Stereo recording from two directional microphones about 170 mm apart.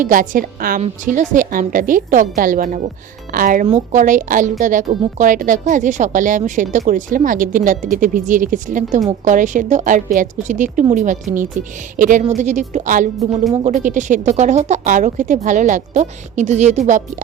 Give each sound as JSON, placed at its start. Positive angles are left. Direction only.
{"t": 0.0, "sound": "a woman's voice", "side_deg": -55}